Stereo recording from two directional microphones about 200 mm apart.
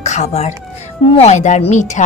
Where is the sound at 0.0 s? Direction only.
35° left (ahead or behind).